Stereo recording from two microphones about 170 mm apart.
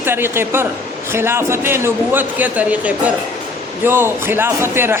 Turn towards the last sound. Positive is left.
turn(degrees=-15)  # may be behind; listen again after turning